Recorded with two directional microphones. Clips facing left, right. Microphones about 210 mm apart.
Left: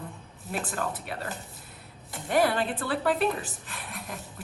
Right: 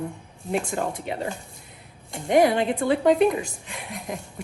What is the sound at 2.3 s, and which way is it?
Speech, 15° right (ahead or behind).